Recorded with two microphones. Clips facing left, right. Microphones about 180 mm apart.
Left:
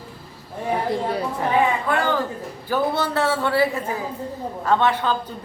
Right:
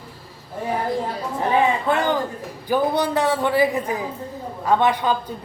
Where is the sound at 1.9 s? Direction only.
20° right (ahead or behind).